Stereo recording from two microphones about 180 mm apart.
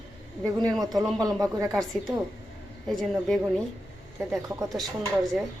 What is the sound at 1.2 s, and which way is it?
Speech, 20° right (ahead or behind).